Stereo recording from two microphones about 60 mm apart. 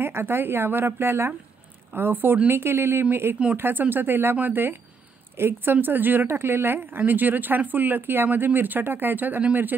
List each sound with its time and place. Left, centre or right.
0.0 s speech: right